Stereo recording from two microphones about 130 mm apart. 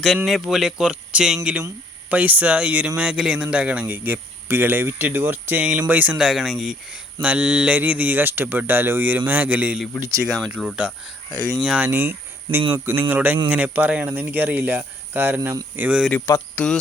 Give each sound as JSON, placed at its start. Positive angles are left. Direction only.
{"t": 0.3, "sound": "speech", "side_deg": 0}
{"t": 11.3, "sound": "speech", "side_deg": -25}
{"t": 11.5, "sound": "speech", "side_deg": -5}
{"t": 16.3, "sound": "speech", "side_deg": 25}